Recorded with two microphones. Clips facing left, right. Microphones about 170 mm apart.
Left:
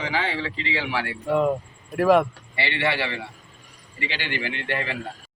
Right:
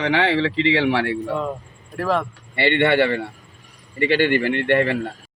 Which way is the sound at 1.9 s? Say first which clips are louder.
Left 4 dB; 10° left (ahead or behind).